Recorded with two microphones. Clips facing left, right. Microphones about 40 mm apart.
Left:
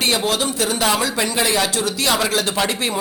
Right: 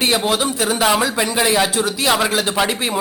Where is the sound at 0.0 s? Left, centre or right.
Centre.